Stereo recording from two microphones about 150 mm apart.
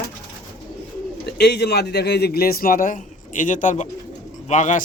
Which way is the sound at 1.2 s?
90° left.